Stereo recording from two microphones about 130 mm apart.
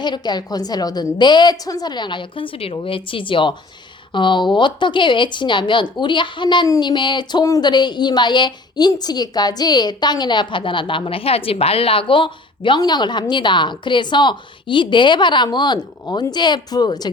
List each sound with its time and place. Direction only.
0.0 s a woman's voice: 35° left (ahead or behind)